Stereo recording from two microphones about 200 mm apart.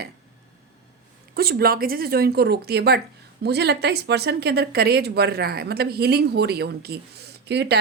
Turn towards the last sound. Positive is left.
turn(degrees=-55)  # may be behind; listen again after turning